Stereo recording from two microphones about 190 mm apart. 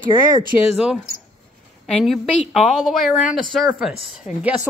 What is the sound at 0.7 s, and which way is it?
Speech, centre (ahead or behind).